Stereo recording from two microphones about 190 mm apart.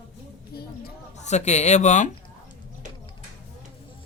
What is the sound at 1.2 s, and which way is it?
Speech, 35° left (ahead or behind).